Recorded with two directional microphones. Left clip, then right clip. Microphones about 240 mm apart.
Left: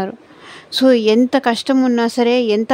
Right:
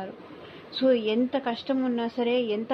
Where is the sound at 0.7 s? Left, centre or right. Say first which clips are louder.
Left 11 dB; left.